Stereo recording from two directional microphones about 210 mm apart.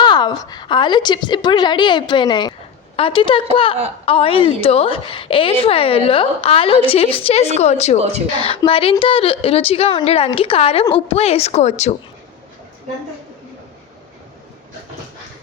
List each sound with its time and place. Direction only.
0.0 s a woman's voice: 20° left (ahead or behind)